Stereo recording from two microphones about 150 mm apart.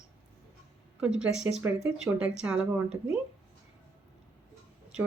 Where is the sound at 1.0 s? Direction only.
5° right (ahead or behind).